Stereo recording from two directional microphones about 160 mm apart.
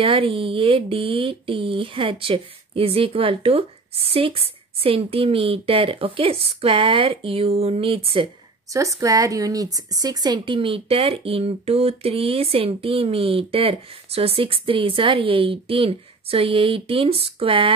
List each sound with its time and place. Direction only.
0.0 s speech: 35° right (ahead or behind)
8.7 s speech: 20° right (ahead or behind)